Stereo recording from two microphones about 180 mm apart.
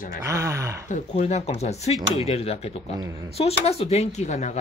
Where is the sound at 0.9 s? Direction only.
35° left (ahead or behind).